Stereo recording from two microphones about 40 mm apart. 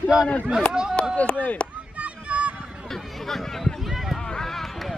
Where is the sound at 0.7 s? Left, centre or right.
Right.